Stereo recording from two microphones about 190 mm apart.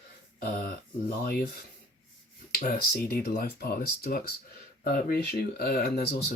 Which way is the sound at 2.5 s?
50° left (ahead or behind).